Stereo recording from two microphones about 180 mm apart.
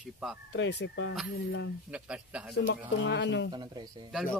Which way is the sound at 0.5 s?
90° left.